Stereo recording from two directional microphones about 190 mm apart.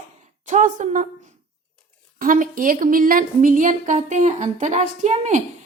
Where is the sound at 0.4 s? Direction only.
40° right (ahead or behind).